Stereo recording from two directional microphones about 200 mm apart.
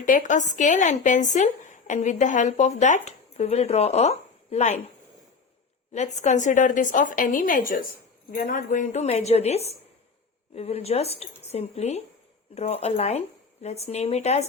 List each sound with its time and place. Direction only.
0.0 s speech: 40° left (ahead or behind)
5.9 s speech: 35° left (ahead or behind)